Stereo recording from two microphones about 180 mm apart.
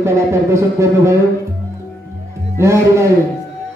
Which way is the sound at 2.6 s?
15° right (ahead or behind).